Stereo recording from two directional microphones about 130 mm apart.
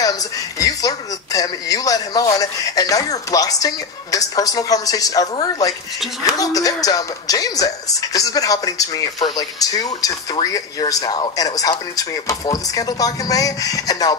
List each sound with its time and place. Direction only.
0.0 s a woman's voice: 30° left (ahead or behind)